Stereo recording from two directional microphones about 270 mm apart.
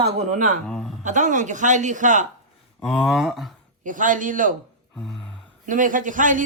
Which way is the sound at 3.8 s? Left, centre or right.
Right.